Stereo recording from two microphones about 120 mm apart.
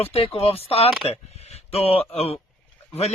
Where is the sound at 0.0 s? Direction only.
55° left (ahead or behind).